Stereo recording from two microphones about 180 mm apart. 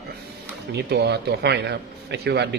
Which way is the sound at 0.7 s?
65° right (ahead or behind).